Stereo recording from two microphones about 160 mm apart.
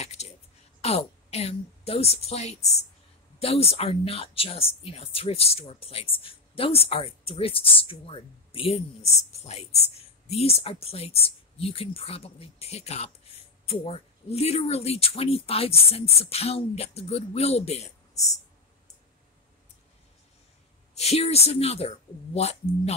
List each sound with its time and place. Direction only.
0.0 s a sound: 40° left (ahead or behind)
0.7 s a woman's voice: 40° left (ahead or behind)
20.9 s speech: 40° left (ahead or behind)